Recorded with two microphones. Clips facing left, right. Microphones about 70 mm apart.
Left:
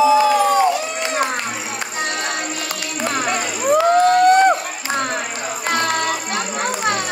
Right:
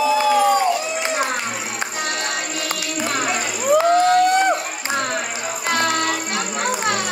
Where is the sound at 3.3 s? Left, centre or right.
Left.